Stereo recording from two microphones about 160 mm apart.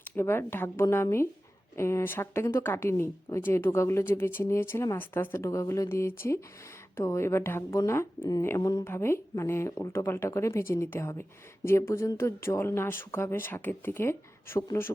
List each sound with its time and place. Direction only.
0.0 s speech: 15° left (ahead or behind)